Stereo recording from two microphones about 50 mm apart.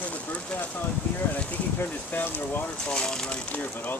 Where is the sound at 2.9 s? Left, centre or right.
Centre.